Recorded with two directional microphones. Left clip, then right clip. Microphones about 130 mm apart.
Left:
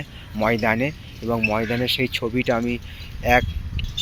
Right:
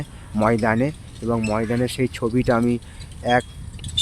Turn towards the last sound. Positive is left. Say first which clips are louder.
# left 2 dB
turn(degrees=-5)  # may be behind; listen again after turning